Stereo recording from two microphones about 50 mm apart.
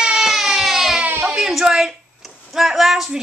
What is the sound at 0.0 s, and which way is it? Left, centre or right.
Baby cry, centre.